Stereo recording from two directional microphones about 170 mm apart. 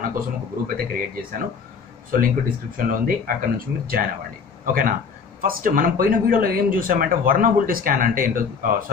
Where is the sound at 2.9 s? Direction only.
55° right (ahead or behind).